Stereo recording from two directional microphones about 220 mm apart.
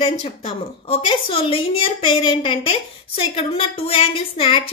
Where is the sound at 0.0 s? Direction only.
25° left (ahead or behind).